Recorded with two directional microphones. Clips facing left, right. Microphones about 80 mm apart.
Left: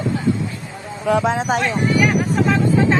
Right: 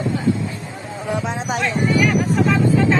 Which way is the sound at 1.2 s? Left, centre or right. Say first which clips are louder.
Left 5 dB; left.